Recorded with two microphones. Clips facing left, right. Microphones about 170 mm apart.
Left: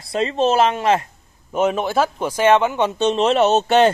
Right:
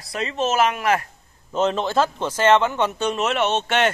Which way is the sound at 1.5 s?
10° left (ahead or behind).